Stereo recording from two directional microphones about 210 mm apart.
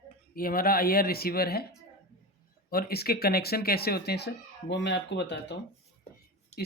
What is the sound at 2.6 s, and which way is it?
Speech, 45° left (ahead or behind).